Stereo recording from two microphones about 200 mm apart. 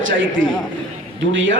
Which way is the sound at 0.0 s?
75° right (ahead or behind).